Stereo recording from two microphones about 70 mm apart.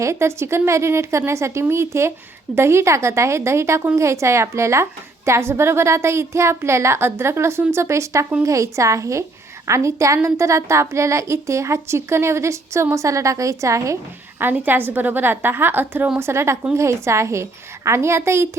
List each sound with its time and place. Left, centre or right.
0.0 s a woman's voice: right
14.6 s a woman's voice: right